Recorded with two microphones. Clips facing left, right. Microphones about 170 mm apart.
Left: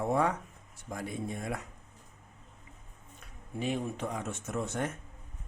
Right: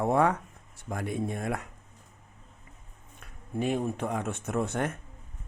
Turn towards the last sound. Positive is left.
turn(degrees=-60)  # may be behind; listen again after turning